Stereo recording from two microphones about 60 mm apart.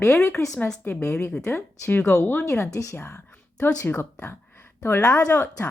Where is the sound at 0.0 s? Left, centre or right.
Left.